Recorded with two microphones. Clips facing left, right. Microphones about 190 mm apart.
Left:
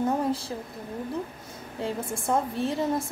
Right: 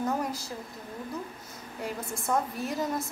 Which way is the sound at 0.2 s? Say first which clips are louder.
Left 6 dB; 30° left (ahead or behind).